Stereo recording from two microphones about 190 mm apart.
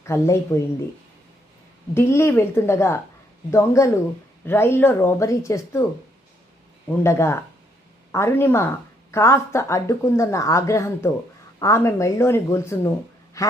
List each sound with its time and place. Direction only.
0.0 s speech: 15° left (ahead or behind)
2.0 s speech: 15° left (ahead or behind)
6.9 s speech: 15° left (ahead or behind)